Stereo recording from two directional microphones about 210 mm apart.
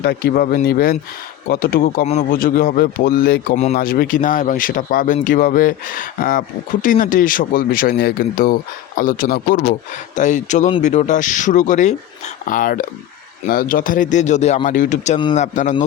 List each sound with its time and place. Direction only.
0.0 s a man's voice: 50° left (ahead or behind)